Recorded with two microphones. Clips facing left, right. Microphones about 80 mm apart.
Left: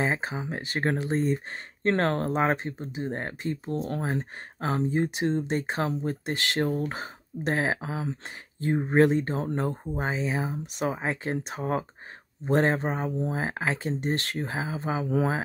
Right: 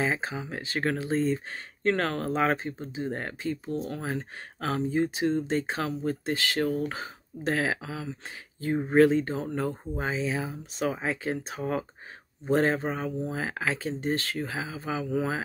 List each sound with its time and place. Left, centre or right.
0.0 s speech: left